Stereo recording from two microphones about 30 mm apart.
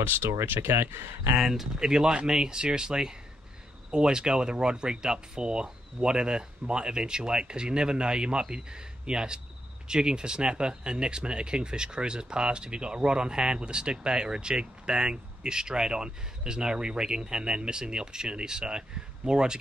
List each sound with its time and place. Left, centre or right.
1.4 s speech: centre; by 19.5 s right